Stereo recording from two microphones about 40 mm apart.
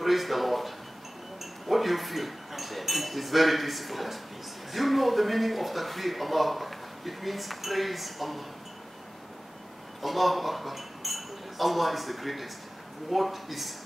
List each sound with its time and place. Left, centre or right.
0.0 s a sound: centre
1.4 s speech: centre
10.0 s speech: centre